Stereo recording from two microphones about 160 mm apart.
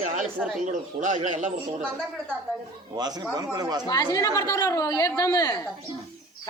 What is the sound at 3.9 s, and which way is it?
A woman's voice, 25° left (ahead or behind).